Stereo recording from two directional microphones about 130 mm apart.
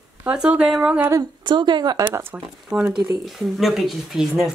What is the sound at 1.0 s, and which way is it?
Speech, 25° right (ahead or behind).